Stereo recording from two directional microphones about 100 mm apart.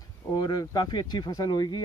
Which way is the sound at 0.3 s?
40° left (ahead or behind).